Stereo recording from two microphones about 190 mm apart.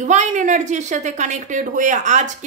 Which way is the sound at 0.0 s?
40° right (ahead or behind).